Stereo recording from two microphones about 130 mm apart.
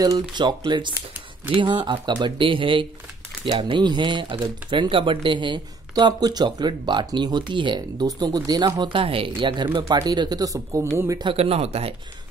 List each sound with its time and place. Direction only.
0.0 s speech: 30° right (ahead or behind)
11.2 s speech: 50° right (ahead or behind)